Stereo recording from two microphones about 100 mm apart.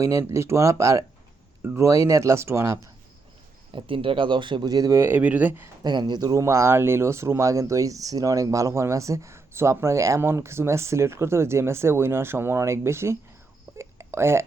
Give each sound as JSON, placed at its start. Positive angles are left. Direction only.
{"t": 0.0, "sound": "speech", "side_deg": -30}
{"t": 3.7, "sound": "speech", "side_deg": -60}
{"t": 4.7, "sound": "speech", "side_deg": -35}
{"t": 5.8, "sound": "speech", "side_deg": -45}
{"t": 13.7, "sound": "a sound", "side_deg": -25}